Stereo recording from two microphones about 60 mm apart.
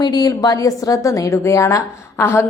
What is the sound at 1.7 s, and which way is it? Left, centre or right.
Speech, left.